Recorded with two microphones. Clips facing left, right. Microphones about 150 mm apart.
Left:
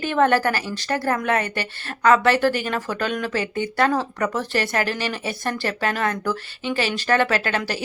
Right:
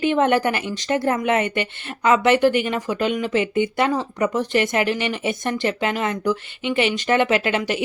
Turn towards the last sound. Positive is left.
turn(degrees=-20)  # may be behind; listen again after turning